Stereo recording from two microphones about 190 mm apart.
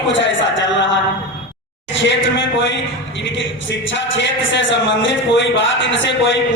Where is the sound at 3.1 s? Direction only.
75° left (ahead or behind).